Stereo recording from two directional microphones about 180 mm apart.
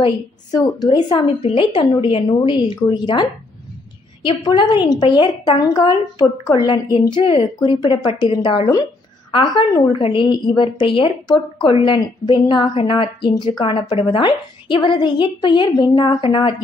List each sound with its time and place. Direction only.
0.0 s a woman's voice: 20° left (ahead or behind)